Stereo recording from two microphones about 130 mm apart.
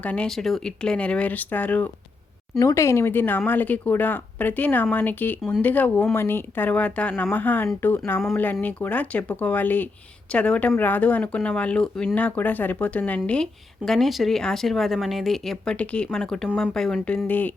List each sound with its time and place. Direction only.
0.0 s speech: 10° left (ahead or behind)
2.6 s speech: 25° left (ahead or behind)